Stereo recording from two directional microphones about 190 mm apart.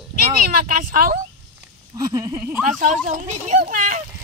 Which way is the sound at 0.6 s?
50° right (ahead or behind).